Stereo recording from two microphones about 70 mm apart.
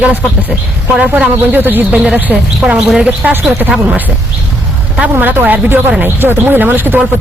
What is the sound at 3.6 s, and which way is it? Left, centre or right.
Speech, right.